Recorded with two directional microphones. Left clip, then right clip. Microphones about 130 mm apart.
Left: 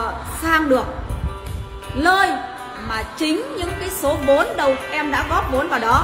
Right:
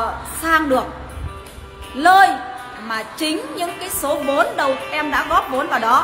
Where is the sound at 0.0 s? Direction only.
15° right (ahead or behind).